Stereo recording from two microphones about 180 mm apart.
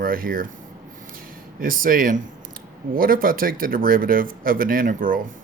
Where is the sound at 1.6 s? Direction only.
50° right (ahead or behind).